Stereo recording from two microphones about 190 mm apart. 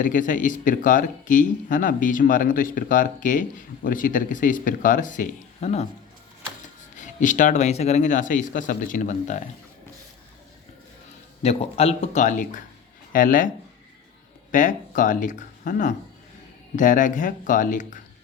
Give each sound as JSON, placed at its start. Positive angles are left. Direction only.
{"t": 0.0, "sound": "speech", "side_deg": 45}
{"t": 6.9, "sound": "speech", "side_deg": 40}
{"t": 11.4, "sound": "speech", "side_deg": 35}
{"t": 14.5, "sound": "speech", "side_deg": 40}